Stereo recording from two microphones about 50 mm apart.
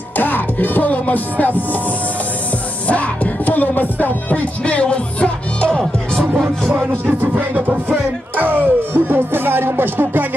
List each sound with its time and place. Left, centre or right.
0.2 s music: left
2.9 s music: left
7.2 s music: right